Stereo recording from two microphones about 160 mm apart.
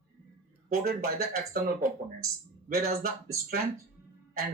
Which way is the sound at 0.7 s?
70° right (ahead or behind).